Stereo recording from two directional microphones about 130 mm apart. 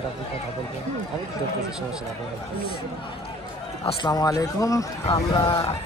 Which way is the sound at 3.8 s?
45° left (ahead or behind).